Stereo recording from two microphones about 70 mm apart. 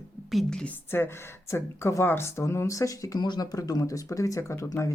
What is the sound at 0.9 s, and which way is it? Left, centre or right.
Speech, left.